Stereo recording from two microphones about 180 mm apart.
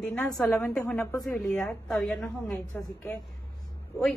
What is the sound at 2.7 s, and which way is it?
Speech, 20° left (ahead or behind).